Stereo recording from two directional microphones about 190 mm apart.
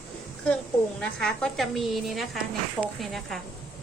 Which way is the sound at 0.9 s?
5° left (ahead or behind).